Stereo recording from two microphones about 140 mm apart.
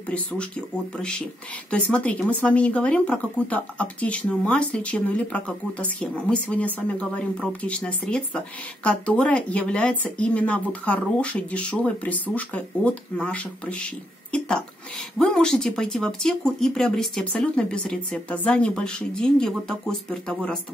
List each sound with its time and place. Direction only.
0.1 s speech: 10° left (ahead or behind)
15.1 s speech: 5° left (ahead or behind)